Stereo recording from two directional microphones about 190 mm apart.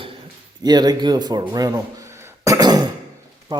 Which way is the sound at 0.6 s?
20° right (ahead or behind).